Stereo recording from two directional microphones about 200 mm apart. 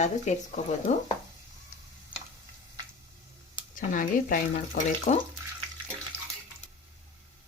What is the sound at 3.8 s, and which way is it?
Speech, 40° left (ahead or behind).